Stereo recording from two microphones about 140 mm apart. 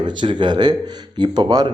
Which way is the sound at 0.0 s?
35° right (ahead or behind).